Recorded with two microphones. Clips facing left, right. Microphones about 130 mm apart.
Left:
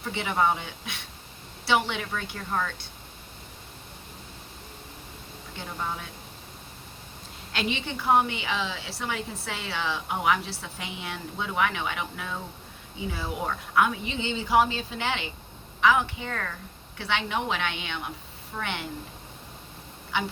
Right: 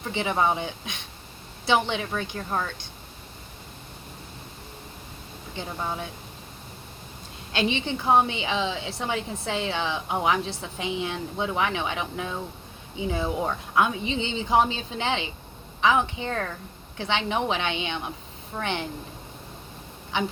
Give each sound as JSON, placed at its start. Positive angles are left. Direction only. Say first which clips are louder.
{"t": 0.1, "sound": "a woman's voice", "louder": "right 1 dB", "side_deg": -25}
{"t": 7.5, "sound": "a woman's voice", "louder": "right 4 dB", "side_deg": -25}